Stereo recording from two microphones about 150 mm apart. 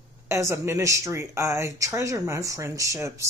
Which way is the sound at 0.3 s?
20° right (ahead or behind).